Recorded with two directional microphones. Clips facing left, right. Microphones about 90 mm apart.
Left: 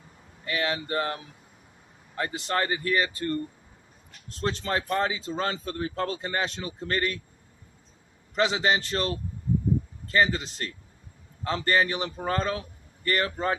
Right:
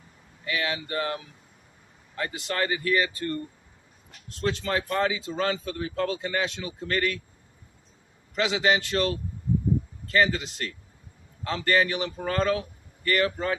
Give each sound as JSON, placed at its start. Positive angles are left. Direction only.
{"t": 0.4, "sound": "speech", "side_deg": 35}
{"t": 8.4, "sound": "speech", "side_deg": 35}